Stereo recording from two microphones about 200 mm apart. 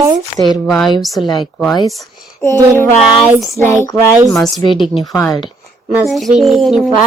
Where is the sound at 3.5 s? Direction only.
15° left (ahead or behind).